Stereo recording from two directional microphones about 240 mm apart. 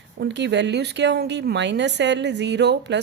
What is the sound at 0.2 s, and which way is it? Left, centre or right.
A woman's voice, right.